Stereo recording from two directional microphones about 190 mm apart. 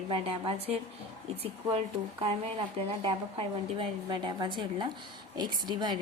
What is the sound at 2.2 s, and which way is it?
A woman's voice, 30° right (ahead or behind).